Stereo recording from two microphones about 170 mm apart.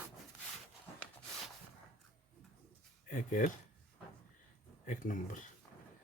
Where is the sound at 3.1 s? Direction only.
55° left (ahead or behind).